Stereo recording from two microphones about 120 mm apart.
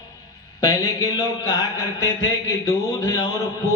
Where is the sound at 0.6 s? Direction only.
30° left (ahead or behind).